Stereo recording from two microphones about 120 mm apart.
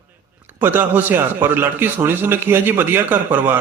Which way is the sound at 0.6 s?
15° right (ahead or behind).